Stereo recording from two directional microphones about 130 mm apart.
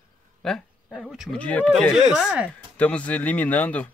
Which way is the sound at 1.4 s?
10° left (ahead or behind).